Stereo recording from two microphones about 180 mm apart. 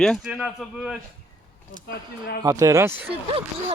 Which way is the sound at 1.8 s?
60° left (ahead or behind).